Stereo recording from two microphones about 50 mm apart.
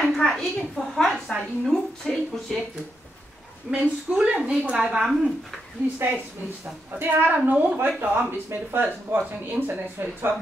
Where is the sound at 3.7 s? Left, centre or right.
Right.